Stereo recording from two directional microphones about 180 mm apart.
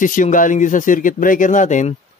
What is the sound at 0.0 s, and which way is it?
Speech, 45° left (ahead or behind).